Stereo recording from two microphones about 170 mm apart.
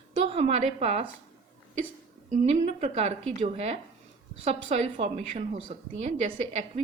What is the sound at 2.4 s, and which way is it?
A woman's voice, 40° right (ahead or behind).